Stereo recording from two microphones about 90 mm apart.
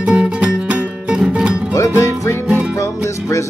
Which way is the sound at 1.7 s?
35° left (ahead or behind).